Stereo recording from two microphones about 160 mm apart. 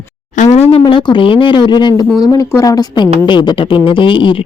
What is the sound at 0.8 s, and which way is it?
Speech, 30° left (ahead or behind).